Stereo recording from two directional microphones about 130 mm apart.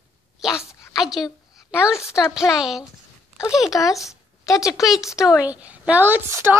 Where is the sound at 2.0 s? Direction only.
20° left (ahead or behind).